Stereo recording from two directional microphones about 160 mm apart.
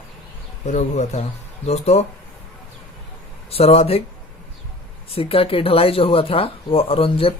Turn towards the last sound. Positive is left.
turn(degrees=35)  # may be behind; listen again after turning